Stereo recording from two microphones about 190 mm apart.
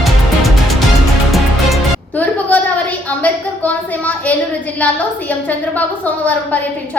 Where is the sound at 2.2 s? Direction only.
10° left (ahead or behind).